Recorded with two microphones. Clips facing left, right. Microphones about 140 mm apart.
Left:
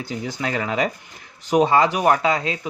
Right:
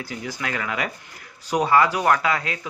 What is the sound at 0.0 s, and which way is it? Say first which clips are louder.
Speech: left 4 dB; 25° left (ahead or behind).